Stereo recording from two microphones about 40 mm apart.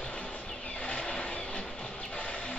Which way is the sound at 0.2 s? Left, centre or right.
Left.